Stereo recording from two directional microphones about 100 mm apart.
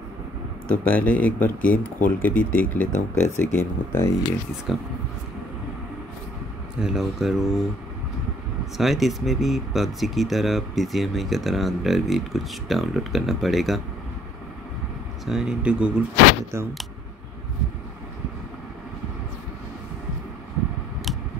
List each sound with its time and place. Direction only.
0.7 s speech: 15° left (ahead or behind)
4.7 s speech: 5° right (ahead or behind)
6.8 s speech: 5° right (ahead or behind)
8.7 s speech: centre (ahead or behind)
15.2 s speech: 5° right (ahead or behind)
16.5 s speech: 30° right (ahead or behind)